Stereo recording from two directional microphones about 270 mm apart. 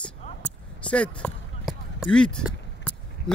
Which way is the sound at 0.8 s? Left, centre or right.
Centre.